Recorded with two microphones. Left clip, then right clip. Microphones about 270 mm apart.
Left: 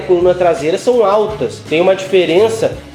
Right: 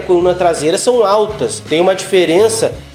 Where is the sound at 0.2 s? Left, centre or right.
Right.